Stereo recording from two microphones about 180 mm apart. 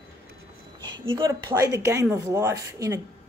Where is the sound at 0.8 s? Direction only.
25° right (ahead or behind).